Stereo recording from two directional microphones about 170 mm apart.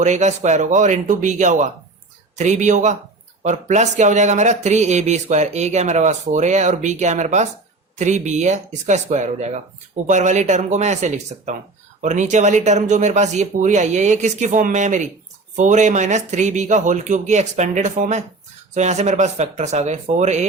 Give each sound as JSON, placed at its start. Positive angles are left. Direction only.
{"t": 0.0, "sound": "speech", "side_deg": -45}